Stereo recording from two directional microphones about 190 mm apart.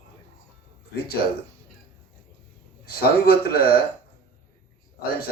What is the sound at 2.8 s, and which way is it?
Speech, 55° left (ahead or behind).